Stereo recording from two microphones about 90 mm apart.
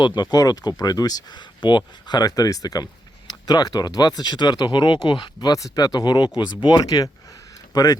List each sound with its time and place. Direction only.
0.0 s speech: 55° left (ahead or behind)
5.5 s speech: 40° left (ahead or behind)